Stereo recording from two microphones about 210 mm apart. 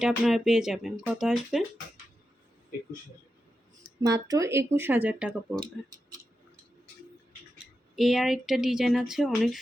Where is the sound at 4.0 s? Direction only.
15° right (ahead or behind).